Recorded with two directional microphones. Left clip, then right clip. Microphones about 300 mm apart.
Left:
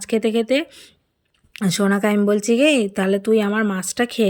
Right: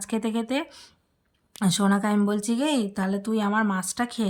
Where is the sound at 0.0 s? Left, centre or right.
Centre.